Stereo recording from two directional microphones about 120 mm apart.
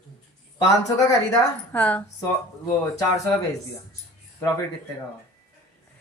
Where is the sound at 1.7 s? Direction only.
15° left (ahead or behind).